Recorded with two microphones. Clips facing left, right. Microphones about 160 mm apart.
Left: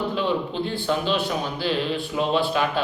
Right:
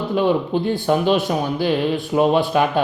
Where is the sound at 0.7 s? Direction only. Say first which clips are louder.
Right 7 dB; 50° right (ahead or behind).